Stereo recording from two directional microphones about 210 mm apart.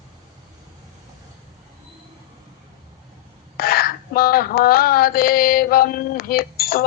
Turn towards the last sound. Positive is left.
turn(degrees=45)  # may be behind; listen again after turning